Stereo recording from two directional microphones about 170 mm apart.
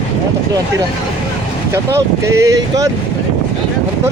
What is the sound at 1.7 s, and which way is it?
Speech, 15° right (ahead or behind).